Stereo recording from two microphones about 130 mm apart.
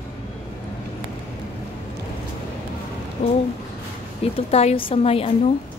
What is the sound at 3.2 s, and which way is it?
Speech, 65° left (ahead or behind).